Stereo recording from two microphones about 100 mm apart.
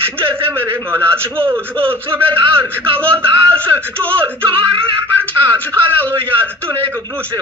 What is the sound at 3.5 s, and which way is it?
Speech, 15° left (ahead or behind).